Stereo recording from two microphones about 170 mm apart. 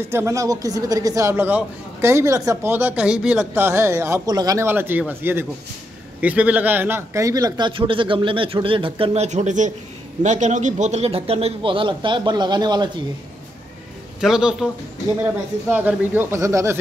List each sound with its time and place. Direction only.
0.1 s a man's voice: 15° right (ahead or behind)
14.2 s a man's voice: 5° right (ahead or behind)
15.7 s speech: 10° right (ahead or behind)